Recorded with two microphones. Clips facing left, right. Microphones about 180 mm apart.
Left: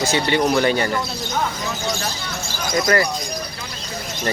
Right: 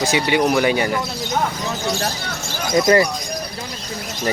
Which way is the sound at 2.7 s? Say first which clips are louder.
Right 4 dB; 20° right (ahead or behind).